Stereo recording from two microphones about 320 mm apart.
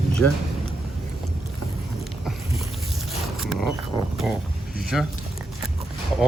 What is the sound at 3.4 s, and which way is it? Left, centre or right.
Vehicle, centre.